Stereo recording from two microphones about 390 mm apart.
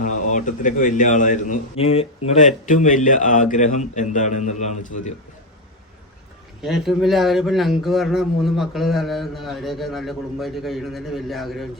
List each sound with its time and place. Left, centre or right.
0.3 s a man's voice: centre
6.6 s speech: centre